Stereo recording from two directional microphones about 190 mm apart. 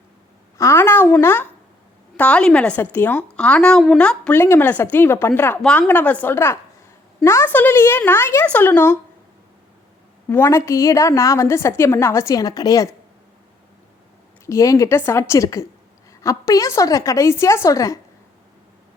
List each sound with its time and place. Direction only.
0.6 s a woman's voice: 15° left (ahead or behind)
10.2 s a woman's voice: 10° left (ahead or behind)
14.4 s a woman's voice: 15° left (ahead or behind)